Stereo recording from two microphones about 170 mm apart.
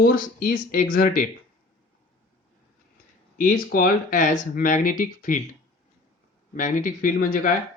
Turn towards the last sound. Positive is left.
turn(degrees=50)  # may be behind; listen again after turning